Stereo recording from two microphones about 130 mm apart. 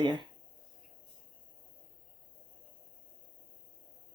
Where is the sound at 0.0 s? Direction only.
35° right (ahead or behind).